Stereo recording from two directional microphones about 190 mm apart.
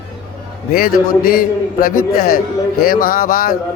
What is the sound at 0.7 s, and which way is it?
Speech, 50° left (ahead or behind).